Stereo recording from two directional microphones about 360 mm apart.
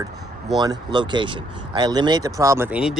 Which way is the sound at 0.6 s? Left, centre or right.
Centre.